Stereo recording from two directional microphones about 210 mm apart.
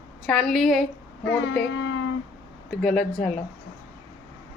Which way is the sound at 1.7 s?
65° left (ahead or behind).